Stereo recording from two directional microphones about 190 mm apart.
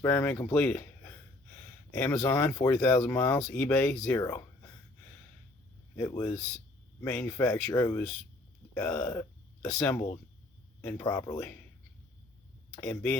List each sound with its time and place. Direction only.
0.0 s speech: 10° left (ahead or behind)
4.2 s a sound: 15° left (ahead or behind)
6.0 s speech: 10° left (ahead or behind)
12.9 s speech: 10° left (ahead or behind)